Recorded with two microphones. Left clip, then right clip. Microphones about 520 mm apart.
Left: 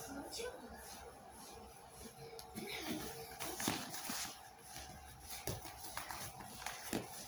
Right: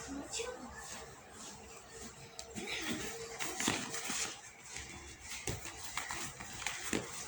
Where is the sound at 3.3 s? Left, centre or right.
Left.